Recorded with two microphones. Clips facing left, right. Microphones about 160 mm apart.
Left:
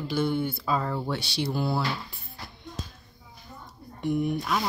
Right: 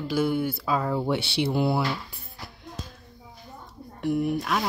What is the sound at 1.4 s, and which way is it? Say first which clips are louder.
Speech: right 3 dB; 20° right (ahead or behind).